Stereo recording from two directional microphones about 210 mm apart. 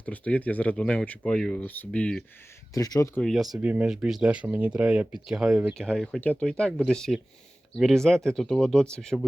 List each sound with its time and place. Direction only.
0.0 s speech: 5° left (ahead or behind)
2.7 s speech: 15° left (ahead or behind)
3.2 s speech: centre (ahead or behind)